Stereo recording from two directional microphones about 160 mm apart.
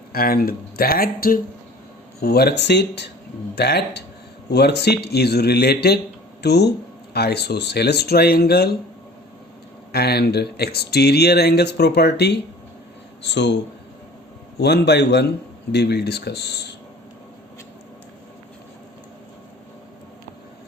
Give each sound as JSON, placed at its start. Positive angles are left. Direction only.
{"t": 0.1, "sound": "speech", "side_deg": 65}
{"t": 2.2, "sound": "speech", "side_deg": 85}
{"t": 9.9, "sound": "speech", "side_deg": 85}
{"t": 14.6, "sound": "speech", "side_deg": 90}